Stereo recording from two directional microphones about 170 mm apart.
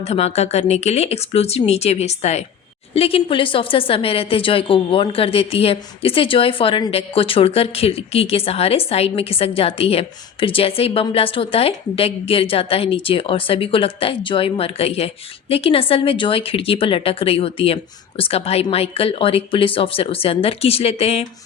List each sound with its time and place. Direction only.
0.0 s a woman's voice: 40° left (ahead or behind)